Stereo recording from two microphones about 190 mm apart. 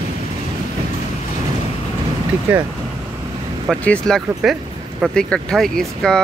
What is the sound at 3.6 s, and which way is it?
Speech, 5° left (ahead or behind).